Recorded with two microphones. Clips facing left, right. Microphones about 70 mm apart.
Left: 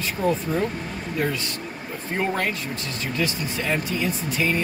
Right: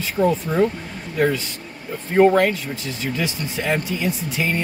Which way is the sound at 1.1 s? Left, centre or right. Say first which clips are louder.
Right 6 dB; centre.